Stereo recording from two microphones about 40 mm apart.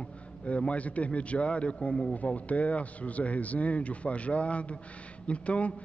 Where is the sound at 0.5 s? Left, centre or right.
Left.